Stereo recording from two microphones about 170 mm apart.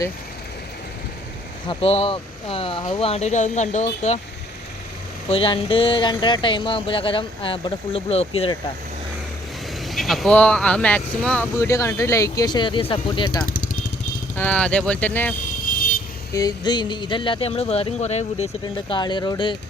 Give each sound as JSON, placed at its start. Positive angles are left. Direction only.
{"t": 1.6, "sound": "speech", "side_deg": 35}
{"t": 5.3, "sound": "speech", "side_deg": 35}
{"t": 9.8, "sound": "speech", "side_deg": 0}
{"t": 13.4, "sound": "vehicle", "side_deg": 60}
{"t": 14.3, "sound": "speech", "side_deg": 10}
{"t": 16.3, "sound": "speech", "side_deg": 20}
{"t": 18.6, "sound": "speech", "side_deg": 25}